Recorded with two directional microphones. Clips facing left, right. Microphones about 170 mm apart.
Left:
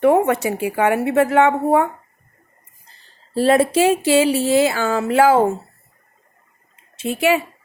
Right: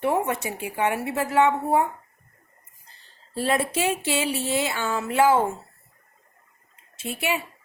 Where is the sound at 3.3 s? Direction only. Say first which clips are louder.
Left 9 dB; 90° left.